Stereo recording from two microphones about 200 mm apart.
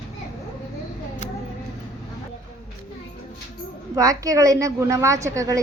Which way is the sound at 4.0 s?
15° right (ahead or behind).